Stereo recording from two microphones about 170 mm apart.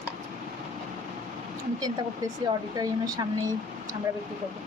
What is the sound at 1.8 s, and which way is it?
Speech, 20° right (ahead or behind).